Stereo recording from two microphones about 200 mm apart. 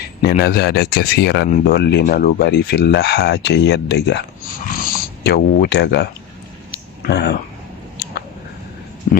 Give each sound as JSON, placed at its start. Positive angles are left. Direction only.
{"t": 0.2, "sound": "speech", "side_deg": 50}
{"t": 4.7, "sound": "a sound", "side_deg": 45}
{"t": 7.0, "sound": "speech", "side_deg": 55}
{"t": 9.1, "sound": "speech", "side_deg": 35}